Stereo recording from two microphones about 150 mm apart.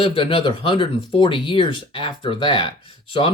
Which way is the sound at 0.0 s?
35° left (ahead or behind).